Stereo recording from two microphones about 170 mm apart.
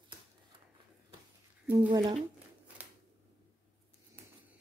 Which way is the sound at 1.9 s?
30° right (ahead or behind).